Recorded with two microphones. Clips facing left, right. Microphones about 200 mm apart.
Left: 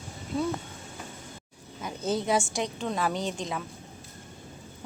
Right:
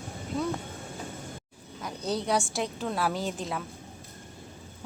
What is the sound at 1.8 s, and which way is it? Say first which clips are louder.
Speech: left 2 dB; centre (ahead or behind).